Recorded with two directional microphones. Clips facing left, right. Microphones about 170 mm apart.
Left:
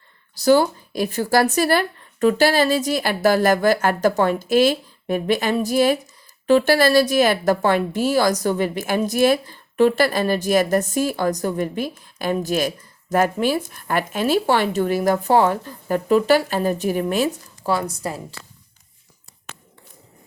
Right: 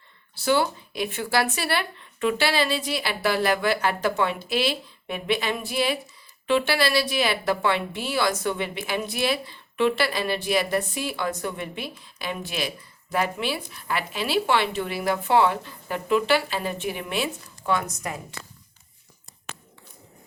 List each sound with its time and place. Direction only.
0.3 s a woman's voice: 40° left (ahead or behind)